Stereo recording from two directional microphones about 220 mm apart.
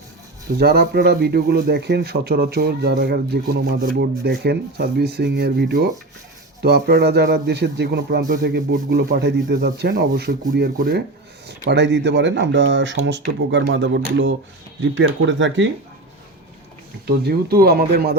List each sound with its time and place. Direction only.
0.6 s speech: 45° right (ahead or behind)
17.1 s speech: 45° right (ahead or behind)